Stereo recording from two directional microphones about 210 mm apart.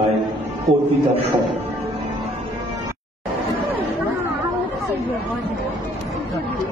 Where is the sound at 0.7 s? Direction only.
35° right (ahead or behind).